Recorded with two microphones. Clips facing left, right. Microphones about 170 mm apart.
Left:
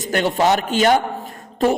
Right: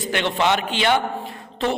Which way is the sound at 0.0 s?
40° left (ahead or behind).